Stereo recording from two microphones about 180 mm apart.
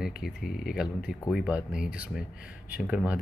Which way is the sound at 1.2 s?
Centre (ahead or behind).